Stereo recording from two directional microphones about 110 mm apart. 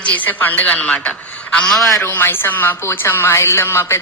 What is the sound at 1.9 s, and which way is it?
A woman's voice, 20° left (ahead or behind).